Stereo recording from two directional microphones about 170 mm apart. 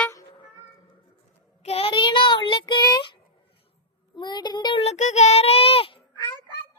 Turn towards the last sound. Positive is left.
turn(degrees=35)  # may be behind; listen again after turning